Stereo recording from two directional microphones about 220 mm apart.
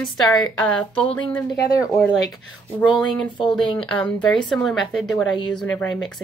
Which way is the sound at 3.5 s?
25° left (ahead or behind).